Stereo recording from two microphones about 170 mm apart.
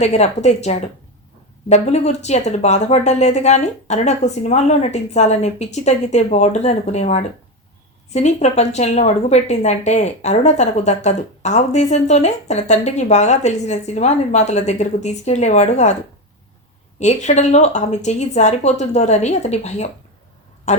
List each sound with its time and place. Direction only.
0.0 s speech: 40° left (ahead or behind)
17.0 s speech: 40° left (ahead or behind)